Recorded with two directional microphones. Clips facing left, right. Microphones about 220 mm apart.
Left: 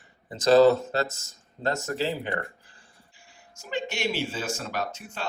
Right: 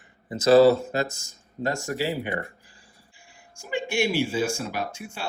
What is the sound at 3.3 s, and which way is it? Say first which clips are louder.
Speech: right 2 dB; 10° right (ahead or behind).